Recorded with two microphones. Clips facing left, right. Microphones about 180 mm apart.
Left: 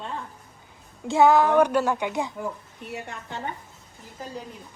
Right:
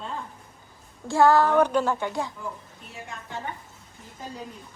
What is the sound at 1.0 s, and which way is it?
A child's voice, 20° left (ahead or behind).